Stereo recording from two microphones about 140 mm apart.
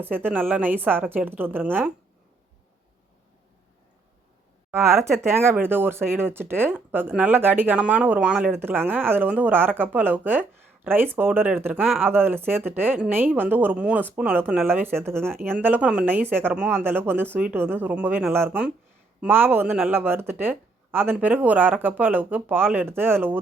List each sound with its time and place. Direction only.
0.0 s speech: 15° right (ahead or behind)
4.7 s speech: 20° right (ahead or behind)